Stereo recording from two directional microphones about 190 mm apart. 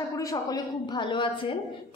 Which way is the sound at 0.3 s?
20° left (ahead or behind).